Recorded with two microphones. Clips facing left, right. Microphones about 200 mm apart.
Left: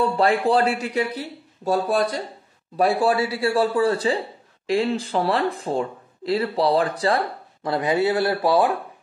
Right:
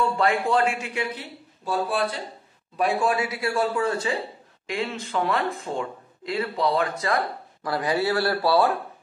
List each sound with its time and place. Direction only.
0.0 s speech: 35° left (ahead or behind)
7.6 s speech: 20° left (ahead or behind)